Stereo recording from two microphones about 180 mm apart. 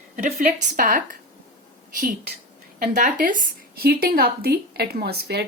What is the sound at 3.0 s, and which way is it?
Speech, 45° right (ahead or behind).